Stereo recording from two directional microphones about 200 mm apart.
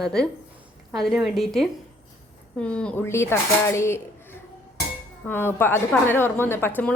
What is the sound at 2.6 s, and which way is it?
A woman's voice, 5° left (ahead or behind).